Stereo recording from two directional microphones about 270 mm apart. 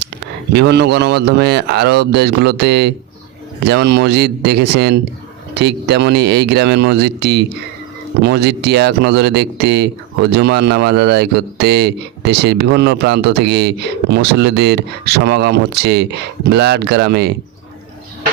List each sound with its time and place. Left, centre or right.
0.5 s speech: right